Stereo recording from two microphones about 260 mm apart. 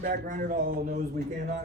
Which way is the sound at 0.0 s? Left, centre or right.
Right.